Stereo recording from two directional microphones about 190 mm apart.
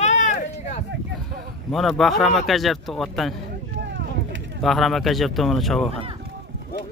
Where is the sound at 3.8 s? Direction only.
70° right (ahead or behind).